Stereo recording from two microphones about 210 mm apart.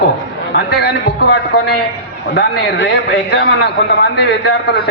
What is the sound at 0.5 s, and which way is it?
Speech, 50° left (ahead or behind).